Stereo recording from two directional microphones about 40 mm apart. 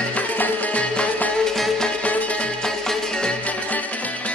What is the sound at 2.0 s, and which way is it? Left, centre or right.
Music, left.